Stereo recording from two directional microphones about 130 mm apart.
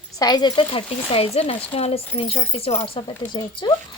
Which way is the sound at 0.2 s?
30° left (ahead or behind).